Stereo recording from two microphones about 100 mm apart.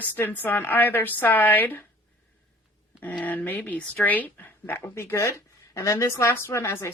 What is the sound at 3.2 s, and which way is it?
Speech, 15° left (ahead or behind).